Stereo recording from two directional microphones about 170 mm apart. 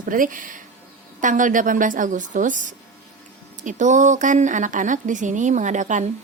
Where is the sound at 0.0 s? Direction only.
55° right (ahead or behind).